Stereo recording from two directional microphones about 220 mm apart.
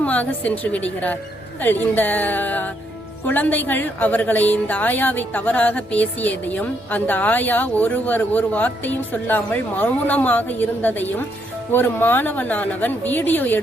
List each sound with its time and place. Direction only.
0.0 s a woman's voice: 5° left (ahead or behind)